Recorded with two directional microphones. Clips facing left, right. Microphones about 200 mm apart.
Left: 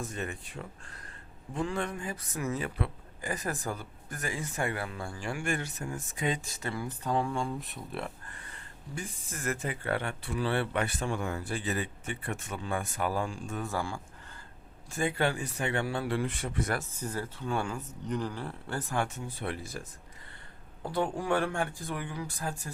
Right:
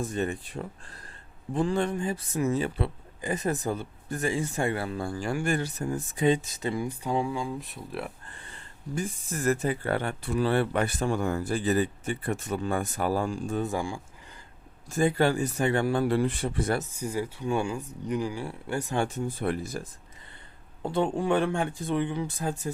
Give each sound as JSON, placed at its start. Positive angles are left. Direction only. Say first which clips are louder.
{"t": 0.0, "sound": "speech", "louder": "right 7 dB", "side_deg": -30}
{"t": 8.3, "sound": "a sound", "louder": "right 1 dB", "side_deg": -30}
{"t": 9.0, "sound": "speech", "louder": "right 8 dB", "side_deg": -35}
{"t": 13.6, "sound": "speech", "louder": "right 2 dB", "side_deg": -15}
{"t": 14.8, "sound": "speech", "louder": "right 6 dB", "side_deg": -40}
{"t": 16.9, "sound": "speech", "louder": "right 5 dB", "side_deg": -10}
{"t": 18.9, "sound": "speech", "louder": "right 4 dB", "side_deg": -35}
{"t": 20.8, "sound": "speech", "louder": "right 5 dB", "side_deg": -25}